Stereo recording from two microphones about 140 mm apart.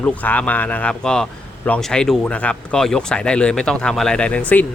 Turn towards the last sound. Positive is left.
turn(degrees=10)  # may be behind; listen again after turning